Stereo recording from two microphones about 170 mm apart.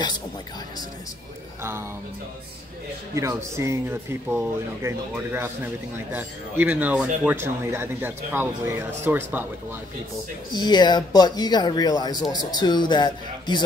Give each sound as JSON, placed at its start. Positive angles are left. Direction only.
{"t": 1.6, "sound": "speech", "side_deg": -15}
{"t": 3.2, "sound": "speech", "side_deg": -15}
{"t": 10.5, "sound": "speech", "side_deg": 25}